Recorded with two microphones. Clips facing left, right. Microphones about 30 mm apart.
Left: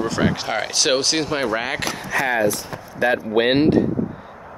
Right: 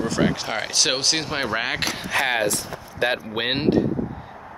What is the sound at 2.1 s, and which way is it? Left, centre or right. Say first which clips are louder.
Speech: left 3 dB; right.